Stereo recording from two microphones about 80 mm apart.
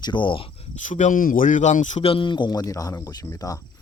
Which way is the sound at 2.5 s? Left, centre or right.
Left.